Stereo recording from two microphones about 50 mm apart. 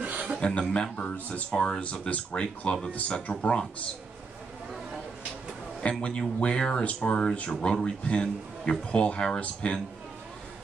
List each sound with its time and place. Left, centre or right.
0.0 s chuckle: right
0.6 s speech: centre
0.9 s speech: left
1.5 s speech: centre
1.8 s speech: left
2.4 s speech: centre
2.9 s speech: left
3.3 s speech: centre
5.8 s speech: centre